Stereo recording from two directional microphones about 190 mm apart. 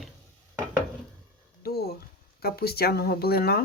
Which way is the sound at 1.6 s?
55° left (ahead or behind).